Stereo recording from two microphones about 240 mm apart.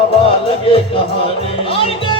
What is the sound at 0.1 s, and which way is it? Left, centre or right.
Music, left.